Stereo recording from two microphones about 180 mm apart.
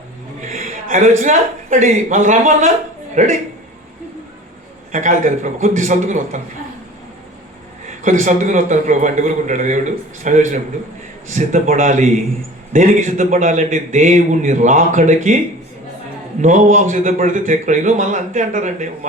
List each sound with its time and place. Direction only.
0.5 s a sound: 50° right (ahead or behind)
1.2 s a man's voice: 40° right (ahead or behind)
4.9 s a man's voice: 45° right (ahead or behind)
8.0 s a man's voice: 45° right (ahead or behind)
16.4 s a man's voice: 45° right (ahead or behind)